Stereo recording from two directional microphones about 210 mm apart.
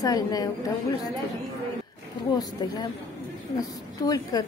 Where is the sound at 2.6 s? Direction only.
20° left (ahead or behind).